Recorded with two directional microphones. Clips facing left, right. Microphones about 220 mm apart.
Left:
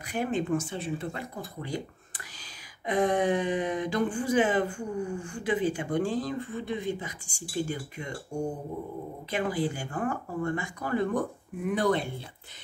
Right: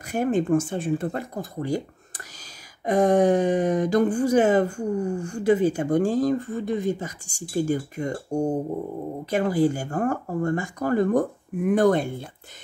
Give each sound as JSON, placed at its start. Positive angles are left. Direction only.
{"t": 0.0, "sound": "speech", "side_deg": -45}